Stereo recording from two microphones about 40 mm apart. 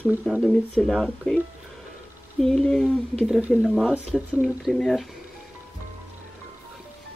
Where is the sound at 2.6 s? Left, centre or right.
Centre.